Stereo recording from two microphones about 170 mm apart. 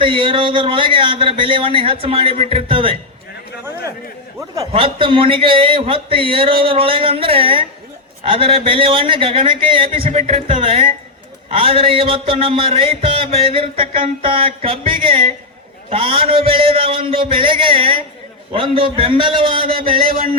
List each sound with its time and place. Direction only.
0.0 s music: 30° right (ahead or behind)
4.4 s a man's voice: 20° right (ahead or behind)
4.7 s music: 30° right (ahead or behind)